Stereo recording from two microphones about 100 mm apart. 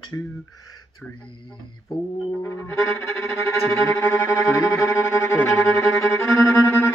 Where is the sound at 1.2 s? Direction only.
50° left (ahead or behind).